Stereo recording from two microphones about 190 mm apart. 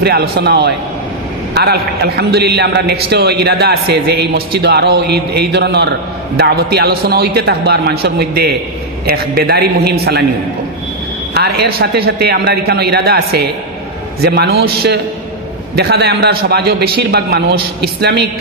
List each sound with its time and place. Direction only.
0.0 s a man's voice: 55° right (ahead or behind)
11.3 s a man's voice: 60° right (ahead or behind)